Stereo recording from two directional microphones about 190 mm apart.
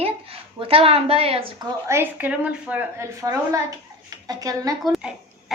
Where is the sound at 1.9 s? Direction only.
10° right (ahead or behind).